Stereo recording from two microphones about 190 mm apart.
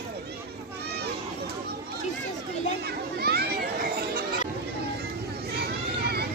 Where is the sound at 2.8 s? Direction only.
55° right (ahead or behind).